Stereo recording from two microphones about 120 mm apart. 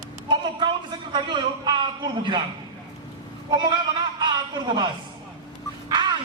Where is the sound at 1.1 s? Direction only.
40° right (ahead or behind).